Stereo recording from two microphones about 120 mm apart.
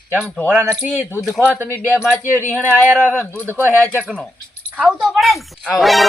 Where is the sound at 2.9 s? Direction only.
15° right (ahead or behind).